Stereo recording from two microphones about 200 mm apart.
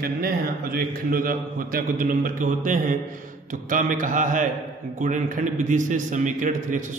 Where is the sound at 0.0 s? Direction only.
45° right (ahead or behind).